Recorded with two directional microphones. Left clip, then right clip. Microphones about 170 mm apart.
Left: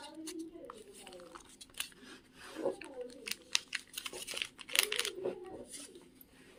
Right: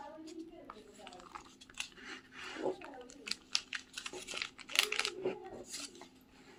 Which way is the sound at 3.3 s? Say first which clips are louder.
Left 1 dB; 15° left (ahead or behind).